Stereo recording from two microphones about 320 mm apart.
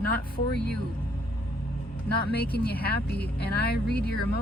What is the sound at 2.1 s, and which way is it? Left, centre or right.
Speech, left.